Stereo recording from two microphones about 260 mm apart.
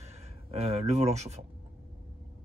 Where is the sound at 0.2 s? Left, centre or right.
Right.